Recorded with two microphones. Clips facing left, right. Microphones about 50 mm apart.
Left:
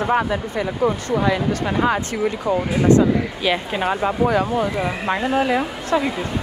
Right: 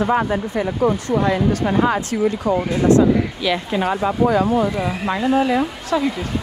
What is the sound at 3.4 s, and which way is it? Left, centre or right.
Speech, left.